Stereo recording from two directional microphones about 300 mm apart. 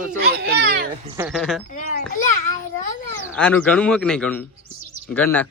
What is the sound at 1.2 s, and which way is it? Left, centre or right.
Speech, centre.